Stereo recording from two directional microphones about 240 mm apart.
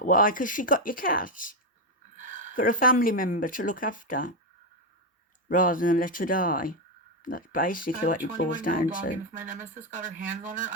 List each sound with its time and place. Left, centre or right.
0.0 s speech: left
2.1 s a sound: right
2.6 s speech: left
5.5 s speech: left
9.3 s speech: right